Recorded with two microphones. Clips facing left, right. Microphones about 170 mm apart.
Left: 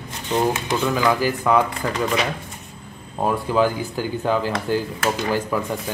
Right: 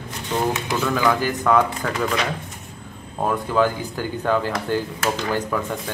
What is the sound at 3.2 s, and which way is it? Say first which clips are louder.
Speech: left 1 dB; 10° left (ahead or behind).